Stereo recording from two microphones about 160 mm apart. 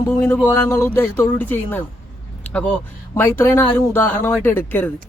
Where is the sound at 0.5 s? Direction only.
15° left (ahead or behind).